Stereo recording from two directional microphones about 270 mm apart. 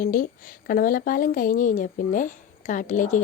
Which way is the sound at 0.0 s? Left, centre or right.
Left.